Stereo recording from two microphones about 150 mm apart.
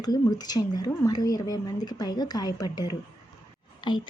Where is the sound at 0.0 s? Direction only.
25° left (ahead or behind).